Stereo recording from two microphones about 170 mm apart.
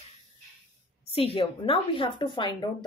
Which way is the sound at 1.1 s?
35° left (ahead or behind).